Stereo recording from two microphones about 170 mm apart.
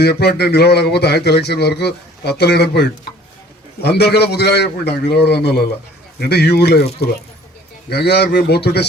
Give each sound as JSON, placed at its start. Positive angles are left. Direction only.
{"t": 0.0, "sound": "speech", "side_deg": 70}
{"t": 7.9, "sound": "speech", "side_deg": 75}